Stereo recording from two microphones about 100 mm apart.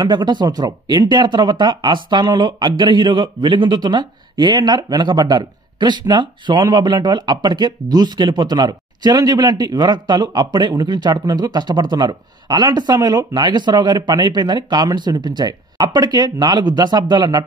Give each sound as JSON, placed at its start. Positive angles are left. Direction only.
{"t": 0.0, "sound": "speech", "side_deg": -45}